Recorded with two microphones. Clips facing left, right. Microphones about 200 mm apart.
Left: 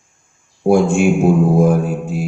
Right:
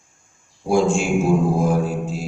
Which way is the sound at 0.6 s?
55° left (ahead or behind).